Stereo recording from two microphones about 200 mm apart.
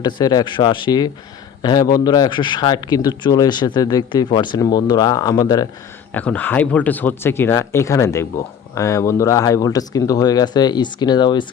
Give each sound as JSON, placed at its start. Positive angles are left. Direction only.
{"t": 0.0, "sound": "speech", "side_deg": 20}